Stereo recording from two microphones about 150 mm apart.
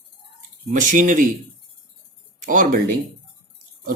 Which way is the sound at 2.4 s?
60° right (ahead or behind).